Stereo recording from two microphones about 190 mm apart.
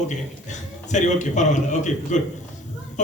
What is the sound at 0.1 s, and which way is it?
A man's voice, 40° left (ahead or behind).